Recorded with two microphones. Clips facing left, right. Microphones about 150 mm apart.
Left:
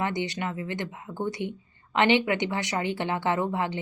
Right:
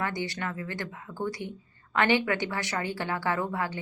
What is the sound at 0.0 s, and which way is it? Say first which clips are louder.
Speech: left 3 dB; 20° left (ahead or behind).